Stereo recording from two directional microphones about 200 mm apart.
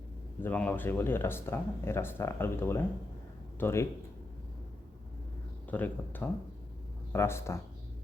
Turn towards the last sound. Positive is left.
turn(degrees=15)  # may be behind; listen again after turning